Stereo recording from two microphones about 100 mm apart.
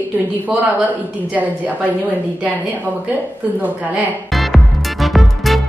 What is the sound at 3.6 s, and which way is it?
Speech, 15° right (ahead or behind).